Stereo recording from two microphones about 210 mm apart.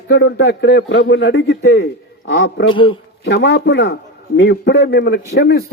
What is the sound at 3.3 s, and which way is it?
A man's voice, 55° left (ahead or behind).